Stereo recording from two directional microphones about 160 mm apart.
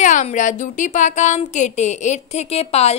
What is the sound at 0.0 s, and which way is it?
A woman's voice, 50° left (ahead or behind).